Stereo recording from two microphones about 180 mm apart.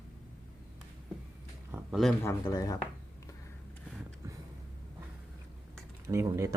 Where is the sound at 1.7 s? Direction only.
Centre (ahead or behind).